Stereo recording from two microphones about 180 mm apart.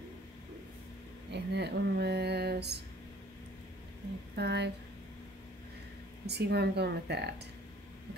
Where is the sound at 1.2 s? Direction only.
70° right (ahead or behind).